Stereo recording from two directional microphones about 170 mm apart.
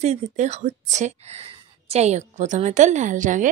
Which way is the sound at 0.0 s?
40° right (ahead or behind).